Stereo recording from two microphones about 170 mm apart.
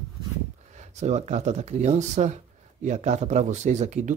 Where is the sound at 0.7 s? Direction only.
40° right (ahead or behind).